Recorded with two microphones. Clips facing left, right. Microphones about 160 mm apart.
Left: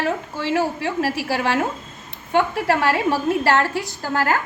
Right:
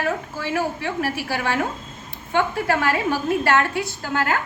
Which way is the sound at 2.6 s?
30° left (ahead or behind).